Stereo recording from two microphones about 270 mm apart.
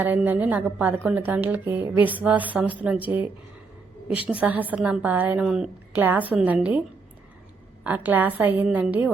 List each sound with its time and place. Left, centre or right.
0.0 s a woman's voice: centre
7.9 s a woman's voice: centre